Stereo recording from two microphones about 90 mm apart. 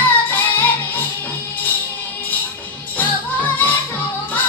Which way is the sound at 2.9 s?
20° left (ahead or behind).